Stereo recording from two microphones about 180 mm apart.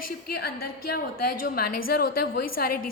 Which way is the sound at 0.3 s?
60° left (ahead or behind).